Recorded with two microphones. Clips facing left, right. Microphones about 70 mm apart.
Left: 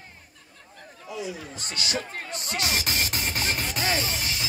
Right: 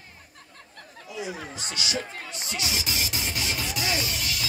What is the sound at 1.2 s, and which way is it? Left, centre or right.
Speech, right.